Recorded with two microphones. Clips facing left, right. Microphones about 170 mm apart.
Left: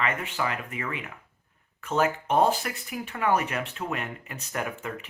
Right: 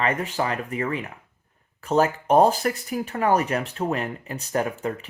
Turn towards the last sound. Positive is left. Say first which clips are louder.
# right 7 dB
turn(degrees=-35)  # may be behind; listen again after turning